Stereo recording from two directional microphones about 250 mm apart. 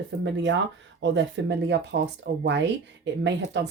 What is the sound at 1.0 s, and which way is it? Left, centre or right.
Speech, right.